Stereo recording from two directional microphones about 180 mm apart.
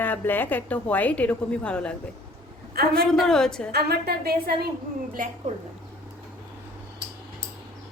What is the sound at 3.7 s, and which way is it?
A woman's voice, 60° right (ahead or behind).